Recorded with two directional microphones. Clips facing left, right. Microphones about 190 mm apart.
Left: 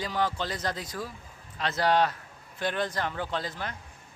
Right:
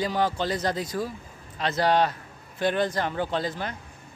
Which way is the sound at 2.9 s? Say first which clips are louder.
Right 4 dB; 30° right (ahead or behind).